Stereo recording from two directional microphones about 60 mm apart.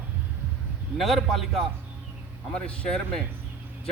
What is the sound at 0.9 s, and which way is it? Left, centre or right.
Speech, centre.